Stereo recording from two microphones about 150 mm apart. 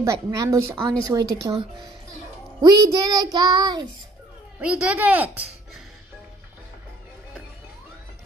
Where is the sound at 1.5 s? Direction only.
35° right (ahead or behind).